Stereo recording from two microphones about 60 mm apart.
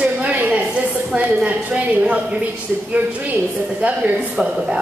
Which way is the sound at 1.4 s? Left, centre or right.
Centre.